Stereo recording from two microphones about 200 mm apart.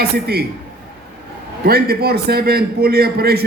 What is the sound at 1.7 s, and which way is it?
A man's voice, 50° right (ahead or behind).